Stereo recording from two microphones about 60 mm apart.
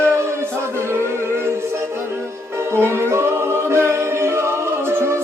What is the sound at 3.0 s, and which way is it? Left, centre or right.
A capella, right.